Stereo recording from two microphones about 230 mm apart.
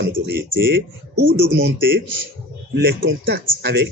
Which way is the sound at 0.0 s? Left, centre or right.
Right.